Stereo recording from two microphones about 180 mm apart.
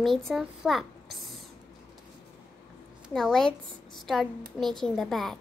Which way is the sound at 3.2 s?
Centre (ahead or behind).